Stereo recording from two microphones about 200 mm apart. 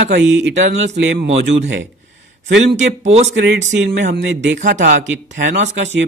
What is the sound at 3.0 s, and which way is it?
Speech, 35° right (ahead or behind).